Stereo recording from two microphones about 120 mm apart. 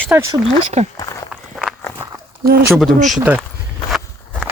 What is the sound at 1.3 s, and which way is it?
Walk, centre (ahead or behind).